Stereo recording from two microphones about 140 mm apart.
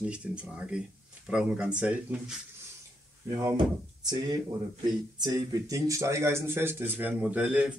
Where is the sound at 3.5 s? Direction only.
30° right (ahead or behind).